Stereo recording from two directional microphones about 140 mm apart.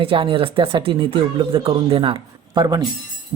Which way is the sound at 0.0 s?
40° right (ahead or behind).